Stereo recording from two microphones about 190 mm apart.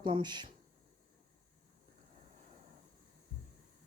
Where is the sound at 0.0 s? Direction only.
25° right (ahead or behind).